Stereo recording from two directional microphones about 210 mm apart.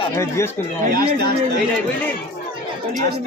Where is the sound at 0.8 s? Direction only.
50° right (ahead or behind).